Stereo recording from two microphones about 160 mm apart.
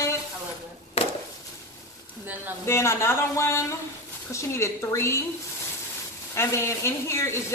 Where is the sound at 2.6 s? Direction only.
15° left (ahead or behind).